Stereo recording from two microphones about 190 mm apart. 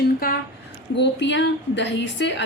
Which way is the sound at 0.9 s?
65° left (ahead or behind).